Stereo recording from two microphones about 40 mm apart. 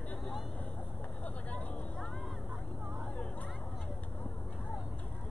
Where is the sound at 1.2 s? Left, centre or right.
Left.